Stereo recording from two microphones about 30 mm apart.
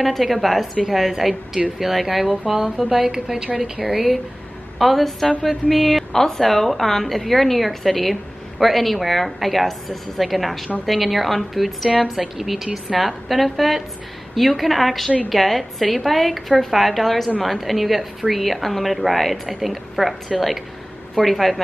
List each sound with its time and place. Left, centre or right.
0.0 s a woman's voice: centre
3.1 s a woman's voice: right
3.8 s a woman's voice: centre
6.1 s a woman's voice: centre